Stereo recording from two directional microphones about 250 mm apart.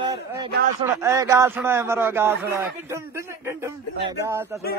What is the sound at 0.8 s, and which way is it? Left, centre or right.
A man's voice, centre.